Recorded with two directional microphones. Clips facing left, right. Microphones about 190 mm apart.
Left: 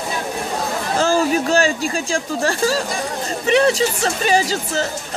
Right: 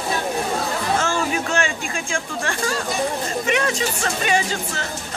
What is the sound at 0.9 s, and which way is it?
Speech, 35° left (ahead or behind).